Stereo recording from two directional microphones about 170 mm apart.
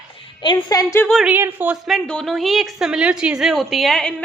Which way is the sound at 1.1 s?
Centre (ahead or behind).